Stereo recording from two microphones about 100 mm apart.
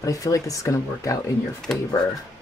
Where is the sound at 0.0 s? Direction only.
35° left (ahead or behind).